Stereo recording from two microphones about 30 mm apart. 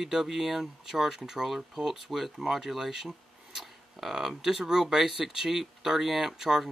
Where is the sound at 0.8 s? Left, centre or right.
Centre.